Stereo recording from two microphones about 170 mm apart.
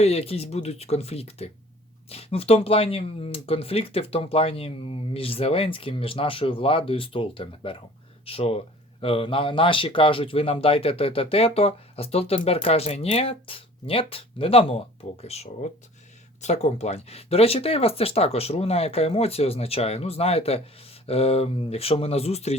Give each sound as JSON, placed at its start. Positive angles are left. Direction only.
{"t": 0.0, "sound": "speech", "side_deg": 35}